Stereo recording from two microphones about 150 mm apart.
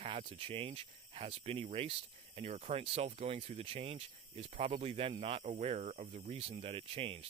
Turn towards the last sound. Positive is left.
turn(degrees=-40)  # may be behind; listen again after turning